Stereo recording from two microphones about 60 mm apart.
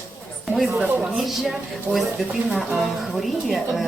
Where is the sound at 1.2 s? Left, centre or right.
Centre.